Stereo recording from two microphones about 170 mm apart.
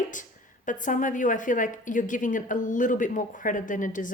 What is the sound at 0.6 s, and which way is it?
Speech, 50° left (ahead or behind).